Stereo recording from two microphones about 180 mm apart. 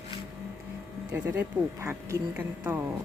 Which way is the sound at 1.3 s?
15° right (ahead or behind).